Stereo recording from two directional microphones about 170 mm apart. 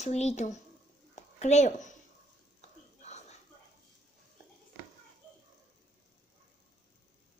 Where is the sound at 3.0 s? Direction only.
40° left (ahead or behind).